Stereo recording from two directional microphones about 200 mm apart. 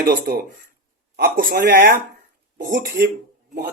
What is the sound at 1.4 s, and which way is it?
Speech, 45° right (ahead or behind).